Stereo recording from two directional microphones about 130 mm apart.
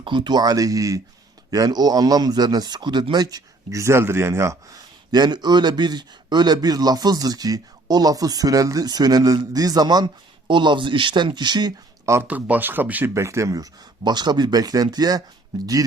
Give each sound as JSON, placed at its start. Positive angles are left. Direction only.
{"t": 0.0, "sound": "speech", "side_deg": -35}
{"t": 5.1, "sound": "speech", "side_deg": -35}
{"t": 12.1, "sound": "speech", "side_deg": -15}